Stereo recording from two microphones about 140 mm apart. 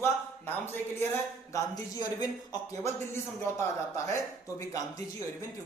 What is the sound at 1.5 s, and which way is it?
A man's voice, 25° left (ahead or behind).